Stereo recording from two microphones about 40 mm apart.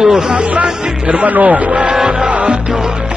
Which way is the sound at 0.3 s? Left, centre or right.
Right.